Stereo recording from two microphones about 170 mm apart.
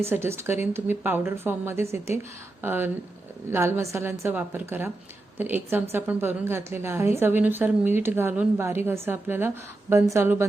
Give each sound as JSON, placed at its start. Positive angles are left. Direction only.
{"t": 0.0, "sound": "a woman's voice", "side_deg": -15}